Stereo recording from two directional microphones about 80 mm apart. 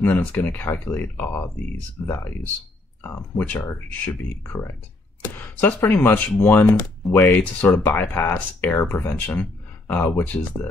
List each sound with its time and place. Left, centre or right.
0.0 s speech: left
3.0 s speech: left